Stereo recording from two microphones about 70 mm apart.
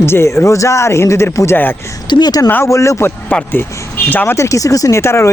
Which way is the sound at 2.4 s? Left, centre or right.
Left.